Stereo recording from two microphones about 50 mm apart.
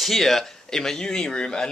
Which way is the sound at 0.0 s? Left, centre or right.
Centre.